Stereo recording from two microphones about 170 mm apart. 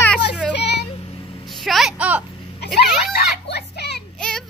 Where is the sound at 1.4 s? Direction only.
Centre (ahead or behind).